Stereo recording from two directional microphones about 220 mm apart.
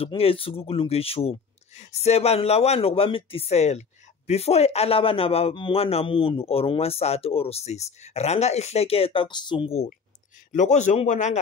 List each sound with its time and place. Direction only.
0.0 s a man's voice: 25° left (ahead or behind)